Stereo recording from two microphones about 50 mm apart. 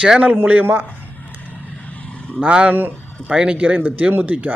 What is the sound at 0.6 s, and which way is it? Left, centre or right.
Speech, right.